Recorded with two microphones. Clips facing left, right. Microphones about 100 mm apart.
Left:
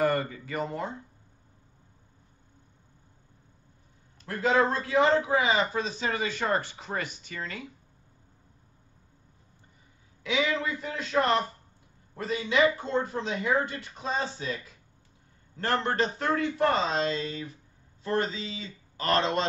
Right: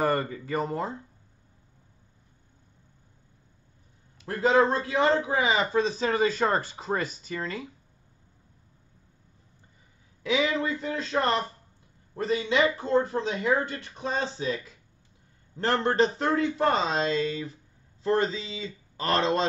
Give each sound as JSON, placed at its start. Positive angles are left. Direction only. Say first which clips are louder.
{"t": 0.0, "sound": "a man's voice", "louder": "even", "side_deg": -35}
{"t": 4.3, "sound": "a man's voice", "louder": "right 3 dB", "side_deg": -30}
{"t": 10.2, "sound": "a man's voice", "louder": "right 2 dB", "side_deg": -30}
{"t": 12.4, "sound": "a man's voice", "louder": "left 2 dB", "side_deg": -30}
{"t": 17.1, "sound": "speech", "louder": "right 5 dB", "side_deg": 35}
{"t": 18.0, "sound": "a man's voice", "louder": "right 4 dB", "side_deg": -30}